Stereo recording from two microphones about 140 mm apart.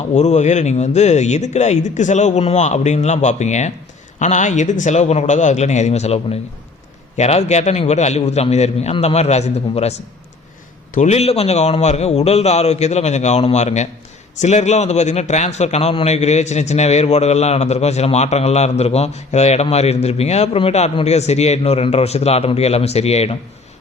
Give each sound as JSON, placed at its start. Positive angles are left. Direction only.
{"t": 0.1, "sound": "a man's voice", "side_deg": 55}
{"t": 10.9, "sound": "a man's voice", "side_deg": 55}